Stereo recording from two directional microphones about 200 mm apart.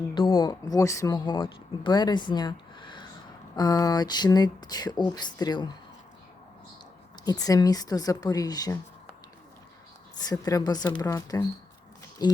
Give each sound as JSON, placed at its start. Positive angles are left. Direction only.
{"t": 0.1, "sound": "speech", "side_deg": 25}
{"t": 7.3, "sound": "speech", "side_deg": 20}
{"t": 10.2, "sound": "speech", "side_deg": 20}